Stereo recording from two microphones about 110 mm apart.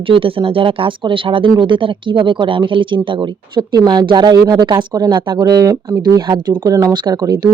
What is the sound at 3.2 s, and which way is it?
Speech, 40° right (ahead or behind).